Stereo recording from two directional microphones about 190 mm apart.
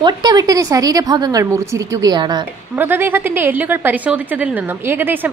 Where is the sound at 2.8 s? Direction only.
10° right (ahead or behind).